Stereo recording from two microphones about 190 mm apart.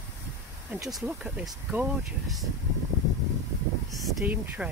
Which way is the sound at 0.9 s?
Centre (ahead or behind).